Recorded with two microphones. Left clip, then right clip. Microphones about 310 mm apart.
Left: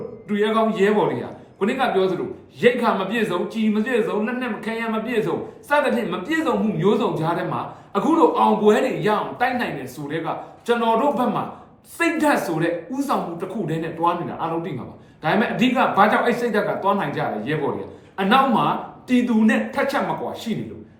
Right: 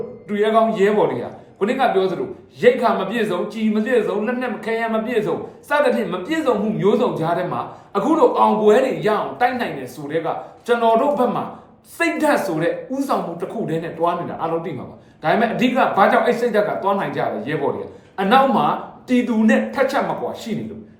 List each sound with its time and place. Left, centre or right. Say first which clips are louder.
0.3 s a man's voice: right 4 dB; centre